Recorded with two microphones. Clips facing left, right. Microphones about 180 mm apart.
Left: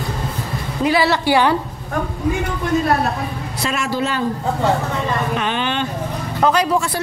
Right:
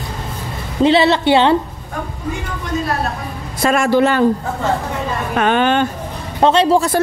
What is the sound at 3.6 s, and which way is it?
Speech, 50° right (ahead or behind).